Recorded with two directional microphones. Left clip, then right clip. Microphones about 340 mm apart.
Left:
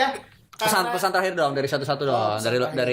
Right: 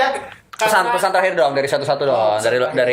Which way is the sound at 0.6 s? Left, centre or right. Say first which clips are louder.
Right 7 dB; left.